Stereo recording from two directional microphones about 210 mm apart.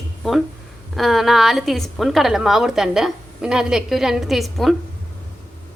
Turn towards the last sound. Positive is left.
turn(degrees=0)  # may be behind; listen again after turning